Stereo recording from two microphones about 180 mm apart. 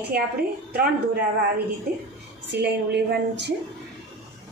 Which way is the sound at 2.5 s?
70° right (ahead or behind).